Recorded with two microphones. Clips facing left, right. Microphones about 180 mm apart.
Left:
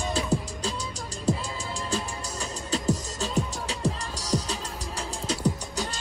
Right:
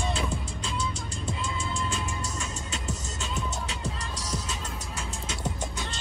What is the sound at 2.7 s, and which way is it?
Music, 35° left (ahead or behind).